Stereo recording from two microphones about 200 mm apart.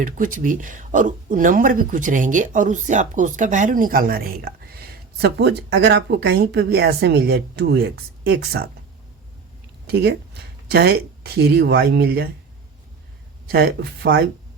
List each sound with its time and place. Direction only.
0.0 s speech: 40° right (ahead or behind)
9.8 s speech: 55° right (ahead or behind)
13.5 s speech: 50° right (ahead or behind)